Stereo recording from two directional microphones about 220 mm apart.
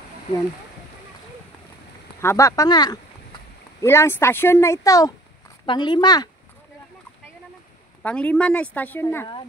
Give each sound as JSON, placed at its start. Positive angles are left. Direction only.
{"t": 2.2, "sound": "speech", "side_deg": 15}
{"t": 8.0, "sound": "speech", "side_deg": 5}